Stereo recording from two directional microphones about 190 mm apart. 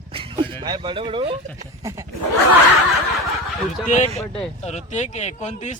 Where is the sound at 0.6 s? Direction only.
25° right (ahead or behind).